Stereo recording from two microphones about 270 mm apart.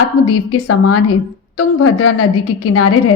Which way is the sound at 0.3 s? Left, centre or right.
Left.